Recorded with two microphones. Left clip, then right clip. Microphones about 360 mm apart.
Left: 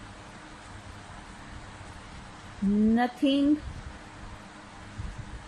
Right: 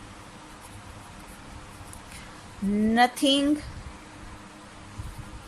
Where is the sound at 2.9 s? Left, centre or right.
Right.